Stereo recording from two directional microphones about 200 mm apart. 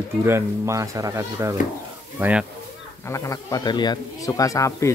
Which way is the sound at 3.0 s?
15° left (ahead or behind).